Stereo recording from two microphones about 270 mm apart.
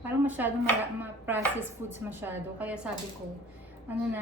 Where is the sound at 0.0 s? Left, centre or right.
Centre.